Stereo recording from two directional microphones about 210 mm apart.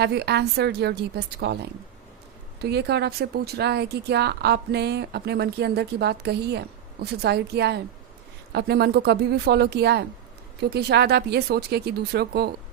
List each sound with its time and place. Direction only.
0.0 s speech: 50° right (ahead or behind)
2.6 s speech: 50° right (ahead or behind)